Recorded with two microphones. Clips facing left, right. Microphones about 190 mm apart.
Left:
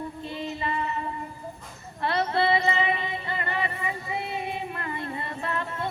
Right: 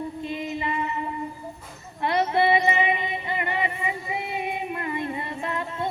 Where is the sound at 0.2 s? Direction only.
20° right (ahead or behind).